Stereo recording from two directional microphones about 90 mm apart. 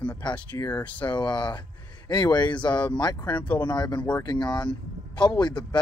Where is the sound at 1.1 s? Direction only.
60° left (ahead or behind).